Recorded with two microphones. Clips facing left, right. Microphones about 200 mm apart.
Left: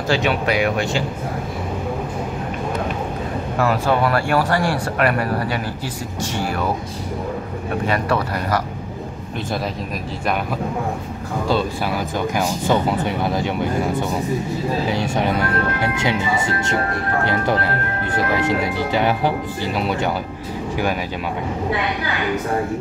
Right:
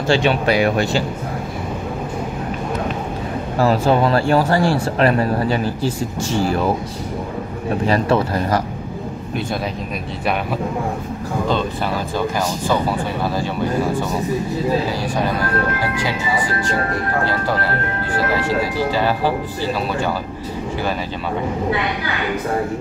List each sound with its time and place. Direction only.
0.1 s speech: 30° right (ahead or behind)
3.5 s speech: 30° right (ahead or behind)
7.8 s speech: 30° right (ahead or behind)
11.4 s speech: 10° left (ahead or behind)
12.4 s speech: 20° left (ahead or behind)
14.9 s speech: 20° left (ahead or behind)